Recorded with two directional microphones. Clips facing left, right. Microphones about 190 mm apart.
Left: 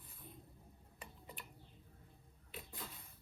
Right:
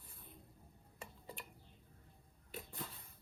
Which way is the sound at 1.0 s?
30° right (ahead or behind).